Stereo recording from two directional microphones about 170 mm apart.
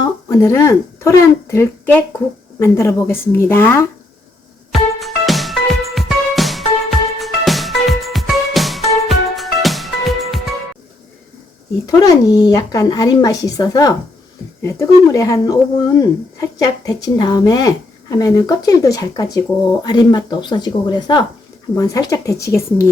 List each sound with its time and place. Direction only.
0.0 s speech: 20° left (ahead or behind)
4.7 s music: centre (ahead or behind)
11.9 s speech: 20° left (ahead or behind)